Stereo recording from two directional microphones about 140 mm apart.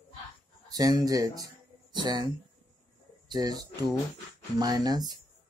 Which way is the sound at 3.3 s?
25° right (ahead or behind).